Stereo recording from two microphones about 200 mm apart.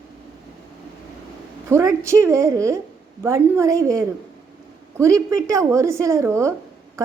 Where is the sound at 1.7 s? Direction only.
15° right (ahead or behind).